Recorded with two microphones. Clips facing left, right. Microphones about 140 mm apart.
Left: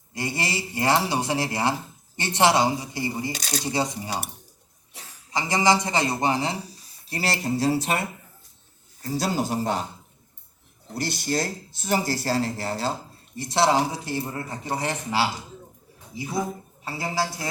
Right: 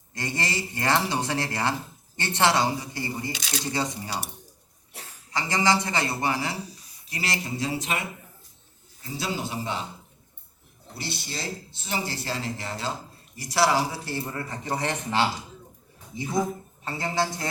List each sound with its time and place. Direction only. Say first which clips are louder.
0.1 s speech: left 2 dB; 10° left (ahead or behind)
3.3 s speech: left 3 dB; 45° left (ahead or behind)
3.6 s speech: left 3 dB; 15° left (ahead or behind)
5.3 s speech: left 3 dB; 15° left (ahead or behind)
7.1 s speech: left 5 dB; 35° left (ahead or behind)
10.9 s speech: left 9 dB; 45° left (ahead or behind); by 17.5 s 10° left (ahead or behind)